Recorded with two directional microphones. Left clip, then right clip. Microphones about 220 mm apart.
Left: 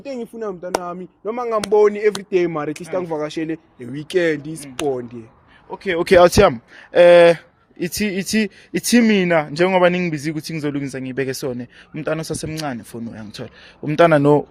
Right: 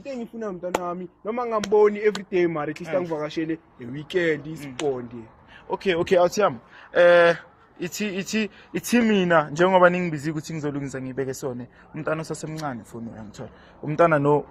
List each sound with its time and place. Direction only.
0.0 s a man's voice: 50° left (ahead or behind)
6.1 s a man's voice: 55° left (ahead or behind)